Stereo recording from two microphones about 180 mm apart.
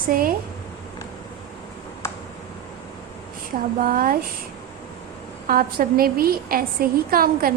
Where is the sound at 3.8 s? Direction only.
50° right (ahead or behind).